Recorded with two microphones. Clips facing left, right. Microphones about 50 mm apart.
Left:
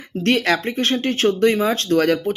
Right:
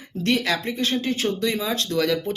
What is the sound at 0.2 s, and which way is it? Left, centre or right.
Speech, left.